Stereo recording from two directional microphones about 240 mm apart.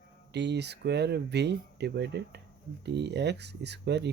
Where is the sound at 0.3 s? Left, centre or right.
Right.